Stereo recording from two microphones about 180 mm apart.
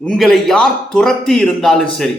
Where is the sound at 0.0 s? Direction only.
5° left (ahead or behind).